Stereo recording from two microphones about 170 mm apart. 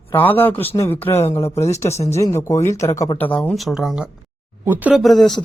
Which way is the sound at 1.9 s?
40° left (ahead or behind).